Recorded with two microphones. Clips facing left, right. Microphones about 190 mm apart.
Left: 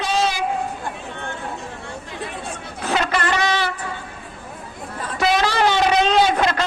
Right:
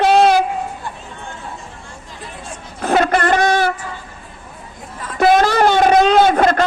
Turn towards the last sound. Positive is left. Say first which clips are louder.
# right 5 dB
turn(degrees=-50)  # may be behind; listen again after turning